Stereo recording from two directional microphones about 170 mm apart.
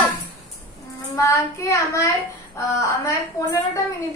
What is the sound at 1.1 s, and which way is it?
Child singing, 20° left (ahead or behind).